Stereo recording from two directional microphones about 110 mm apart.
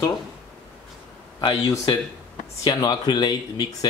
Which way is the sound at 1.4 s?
45° left (ahead or behind).